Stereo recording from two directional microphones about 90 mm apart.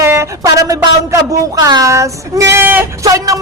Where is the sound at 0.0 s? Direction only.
30° right (ahead or behind).